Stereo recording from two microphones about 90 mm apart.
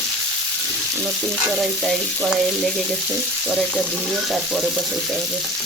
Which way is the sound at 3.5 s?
5° left (ahead or behind).